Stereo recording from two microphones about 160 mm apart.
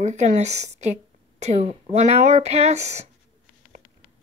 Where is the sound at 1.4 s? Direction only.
45° right (ahead or behind).